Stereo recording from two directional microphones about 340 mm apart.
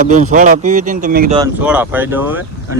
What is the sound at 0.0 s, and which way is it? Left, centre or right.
Speech, right.